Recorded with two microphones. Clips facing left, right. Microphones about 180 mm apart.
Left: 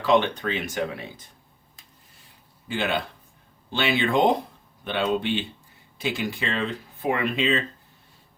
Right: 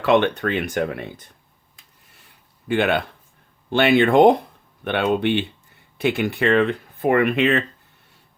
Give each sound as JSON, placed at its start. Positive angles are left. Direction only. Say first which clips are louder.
{"t": 0.0, "sound": "speech", "louder": "right 4 dB", "side_deg": -65}
{"t": 2.2, "sound": "a sound", "louder": "right 9 dB", "side_deg": -60}
{"t": 3.7, "sound": "speech", "louder": "right 8 dB", "side_deg": -60}